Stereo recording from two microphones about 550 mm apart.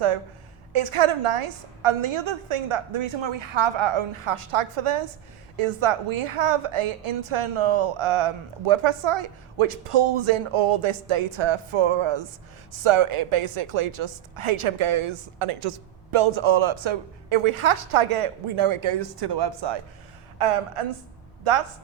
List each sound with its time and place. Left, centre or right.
0.7 s a woman's voice: right
20.4 s a woman's voice: right